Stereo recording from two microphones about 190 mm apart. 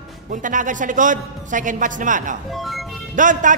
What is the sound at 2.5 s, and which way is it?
Music, centre (ahead or behind).